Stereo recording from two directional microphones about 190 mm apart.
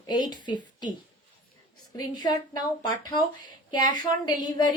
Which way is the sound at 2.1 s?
20° left (ahead or behind).